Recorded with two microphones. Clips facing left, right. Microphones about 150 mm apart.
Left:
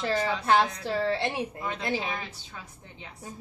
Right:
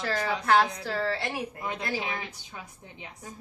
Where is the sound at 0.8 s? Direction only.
20° left (ahead or behind).